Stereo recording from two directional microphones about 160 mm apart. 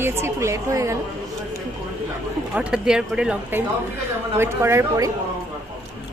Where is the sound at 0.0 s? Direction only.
15° right (ahead or behind).